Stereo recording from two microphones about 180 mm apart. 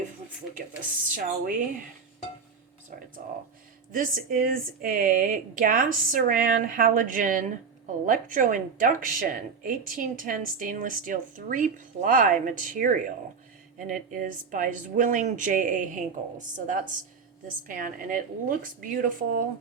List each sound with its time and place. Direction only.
1.1 s a woman's voice: 50° right (ahead or behind)
3.2 s a woman's voice: 45° right (ahead or behind)